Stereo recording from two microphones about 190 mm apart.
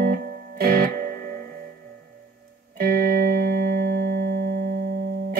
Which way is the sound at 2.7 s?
50° right (ahead or behind).